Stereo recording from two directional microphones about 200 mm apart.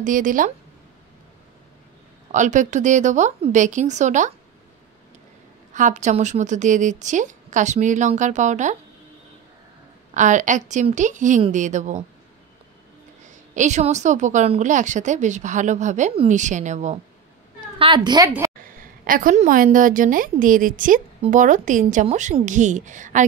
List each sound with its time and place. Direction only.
0.0 s a woman's voice: 40° right (ahead or behind)
2.3 s a woman's voice: 40° right (ahead or behind)
5.7 s a woman's voice: 40° right (ahead or behind)
10.1 s a woman's voice: 40° right (ahead or behind)
13.6 s a woman's voice: 35° right (ahead or behind)
17.7 s a woman's voice: 25° right (ahead or behind)
18.8 s a woman's voice: 45° right (ahead or behind)